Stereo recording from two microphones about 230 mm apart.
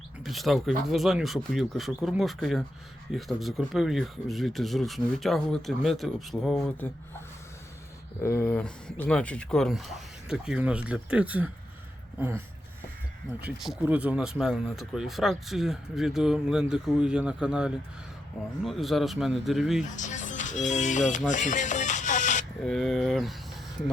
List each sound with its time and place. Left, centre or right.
0.2 s speech: centre
8.2 s speech: centre
13.6 s speech: centre
20.0 s speech: left
21.2 s music: left
22.6 s speech: centre